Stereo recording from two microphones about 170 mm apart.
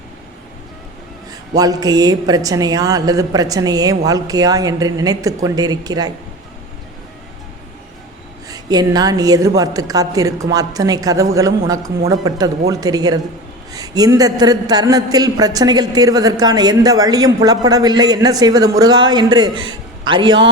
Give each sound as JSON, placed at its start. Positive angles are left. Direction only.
{"t": 1.3, "sound": "speech", "side_deg": -20}
{"t": 8.4, "sound": "a woman's voice", "side_deg": -20}